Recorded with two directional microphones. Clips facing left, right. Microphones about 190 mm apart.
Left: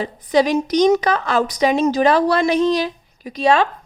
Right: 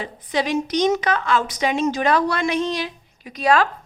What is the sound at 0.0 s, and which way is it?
A woman's voice, 40° left (ahead or behind).